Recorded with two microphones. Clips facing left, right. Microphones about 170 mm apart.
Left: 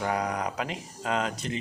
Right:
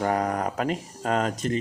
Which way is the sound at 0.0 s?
45° right (ahead or behind).